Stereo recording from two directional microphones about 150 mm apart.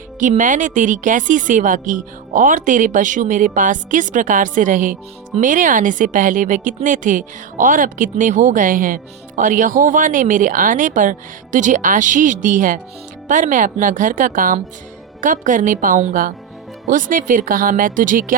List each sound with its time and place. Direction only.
0.2 s a woman's voice: 55° right (ahead or behind)